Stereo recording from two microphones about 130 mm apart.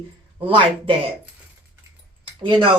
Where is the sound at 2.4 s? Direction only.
40° right (ahead or behind).